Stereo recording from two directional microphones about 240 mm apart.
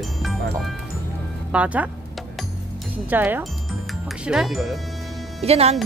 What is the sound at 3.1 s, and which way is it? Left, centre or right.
Speech, centre.